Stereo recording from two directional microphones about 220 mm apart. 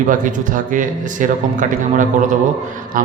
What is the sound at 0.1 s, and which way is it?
A man's voice, 35° right (ahead or behind).